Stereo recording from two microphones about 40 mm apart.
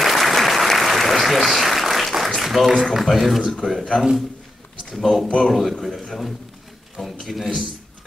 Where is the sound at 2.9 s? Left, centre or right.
Centre.